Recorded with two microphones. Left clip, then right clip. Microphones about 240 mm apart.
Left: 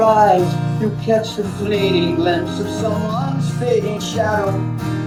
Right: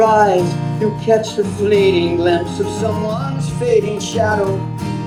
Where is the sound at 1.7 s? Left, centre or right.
Right.